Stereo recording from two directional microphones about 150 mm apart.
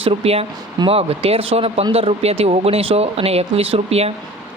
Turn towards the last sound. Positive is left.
turn(degrees=-40)  # may be behind; listen again after turning